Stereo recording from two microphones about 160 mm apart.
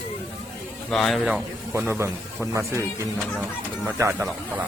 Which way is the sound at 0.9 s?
Centre (ahead or behind).